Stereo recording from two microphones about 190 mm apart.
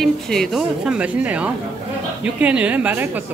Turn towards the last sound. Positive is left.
turn(degrees=-10)  # may be behind; listen again after turning